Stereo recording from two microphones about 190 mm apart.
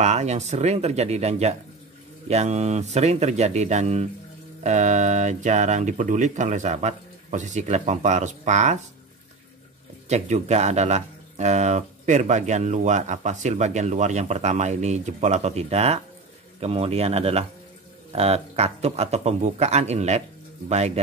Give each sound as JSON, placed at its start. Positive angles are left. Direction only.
{"t": 0.0, "sound": "speech", "side_deg": -35}
{"t": 10.0, "sound": "speech", "side_deg": -35}